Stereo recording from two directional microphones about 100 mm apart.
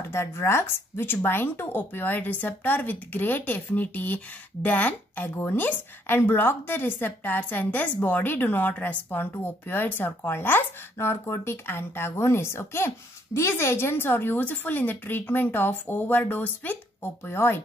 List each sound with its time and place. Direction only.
0.1 s speech: 25° left (ahead or behind)